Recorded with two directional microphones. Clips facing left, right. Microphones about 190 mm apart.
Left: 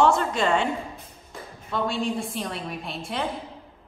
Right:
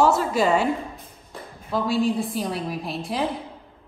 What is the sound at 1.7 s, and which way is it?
A woman's voice, centre (ahead or behind).